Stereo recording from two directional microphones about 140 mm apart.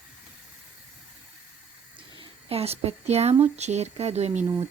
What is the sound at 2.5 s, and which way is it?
Speech, 45° right (ahead or behind).